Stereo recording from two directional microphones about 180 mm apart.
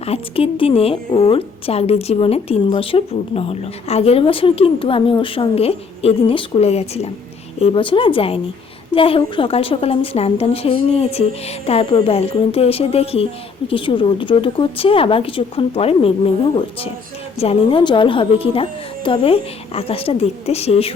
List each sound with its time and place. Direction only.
0.0 s a woman's voice: 30° left (ahead or behind)
17.3 s a woman's voice: 30° left (ahead or behind)